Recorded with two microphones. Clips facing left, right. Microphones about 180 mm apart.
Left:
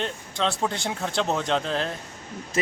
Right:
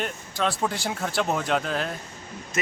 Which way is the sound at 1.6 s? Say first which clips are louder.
Left 1 dB; 30° left (ahead or behind).